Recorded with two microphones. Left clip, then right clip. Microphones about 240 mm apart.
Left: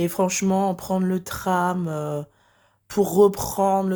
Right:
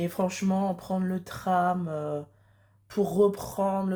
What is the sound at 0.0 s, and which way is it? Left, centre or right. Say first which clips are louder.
Speech: left 7 dB; left.